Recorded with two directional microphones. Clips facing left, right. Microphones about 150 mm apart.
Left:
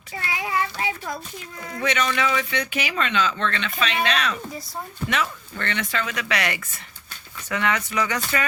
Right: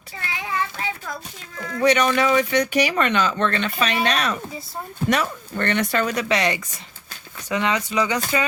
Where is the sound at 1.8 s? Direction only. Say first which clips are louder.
Right 6 dB; 40° right (ahead or behind).